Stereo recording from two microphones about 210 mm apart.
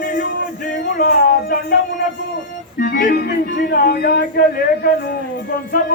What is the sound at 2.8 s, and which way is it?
Speech, 40° left (ahead or behind).